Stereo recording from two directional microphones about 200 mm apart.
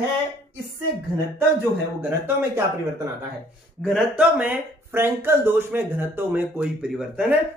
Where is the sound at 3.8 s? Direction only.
Centre (ahead or behind).